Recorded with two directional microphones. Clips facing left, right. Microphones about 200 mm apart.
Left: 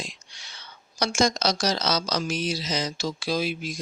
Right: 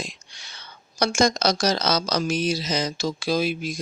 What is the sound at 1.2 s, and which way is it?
Speech, 50° right (ahead or behind).